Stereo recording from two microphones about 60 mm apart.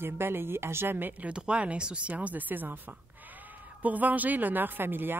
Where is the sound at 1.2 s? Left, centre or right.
Centre.